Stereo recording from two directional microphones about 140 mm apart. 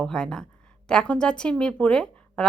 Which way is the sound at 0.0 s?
5° left (ahead or behind).